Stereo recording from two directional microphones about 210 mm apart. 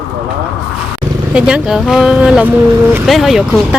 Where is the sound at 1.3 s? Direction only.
5° right (ahead or behind).